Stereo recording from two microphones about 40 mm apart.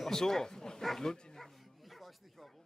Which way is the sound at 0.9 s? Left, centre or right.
Centre.